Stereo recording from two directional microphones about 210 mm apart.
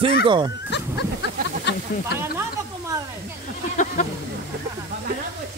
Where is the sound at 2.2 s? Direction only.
10° right (ahead or behind).